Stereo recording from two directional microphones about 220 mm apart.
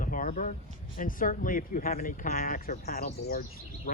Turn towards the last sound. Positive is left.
turn(degrees=40)  # may be behind; listen again after turning